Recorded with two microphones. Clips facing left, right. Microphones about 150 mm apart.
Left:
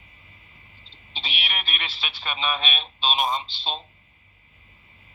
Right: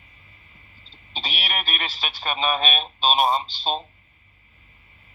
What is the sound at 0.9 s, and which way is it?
Speech, 40° right (ahead or behind).